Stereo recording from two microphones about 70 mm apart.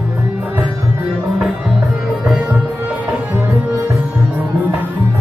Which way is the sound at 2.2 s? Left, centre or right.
Centre.